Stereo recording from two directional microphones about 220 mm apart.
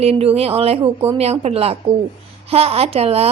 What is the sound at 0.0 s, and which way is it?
A woman's voice, 25° right (ahead or behind).